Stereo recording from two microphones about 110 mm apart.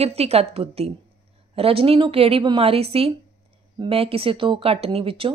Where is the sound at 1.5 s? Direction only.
60° right (ahead or behind).